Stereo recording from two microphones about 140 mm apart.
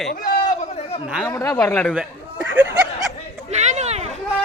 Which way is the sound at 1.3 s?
20° left (ahead or behind).